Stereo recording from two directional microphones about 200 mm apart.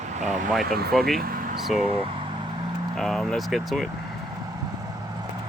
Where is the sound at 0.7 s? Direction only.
50° right (ahead or behind).